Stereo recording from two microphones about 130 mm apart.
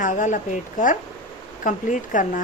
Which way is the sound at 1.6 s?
80° left.